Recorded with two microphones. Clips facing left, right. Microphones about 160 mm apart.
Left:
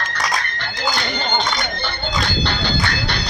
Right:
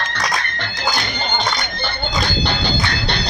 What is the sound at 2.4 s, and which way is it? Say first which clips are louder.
Music: right 1 dB; 20° right (ahead or behind).